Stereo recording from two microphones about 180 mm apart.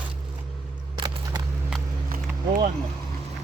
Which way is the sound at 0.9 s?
25° right (ahead or behind).